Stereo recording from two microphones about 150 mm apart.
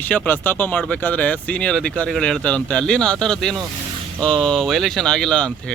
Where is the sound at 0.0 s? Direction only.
10° left (ahead or behind).